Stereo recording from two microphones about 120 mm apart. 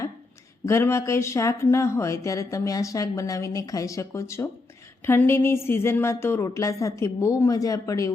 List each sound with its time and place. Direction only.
0.6 s speech: 20° left (ahead or behind)